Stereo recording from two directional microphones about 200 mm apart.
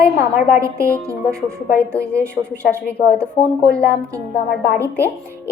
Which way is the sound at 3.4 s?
30° left (ahead or behind).